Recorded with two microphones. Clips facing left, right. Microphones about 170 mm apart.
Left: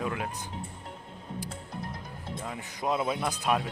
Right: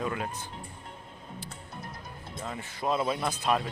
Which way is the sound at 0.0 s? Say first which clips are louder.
Even; 5° left (ahead or behind).